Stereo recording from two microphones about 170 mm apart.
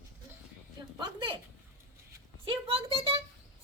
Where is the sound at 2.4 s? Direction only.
35° right (ahead or behind).